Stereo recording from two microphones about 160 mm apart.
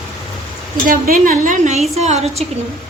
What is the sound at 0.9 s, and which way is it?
A woman's voice, 60° right (ahead or behind).